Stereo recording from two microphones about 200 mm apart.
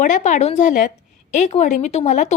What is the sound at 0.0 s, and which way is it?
Speech, 40° left (ahead or behind).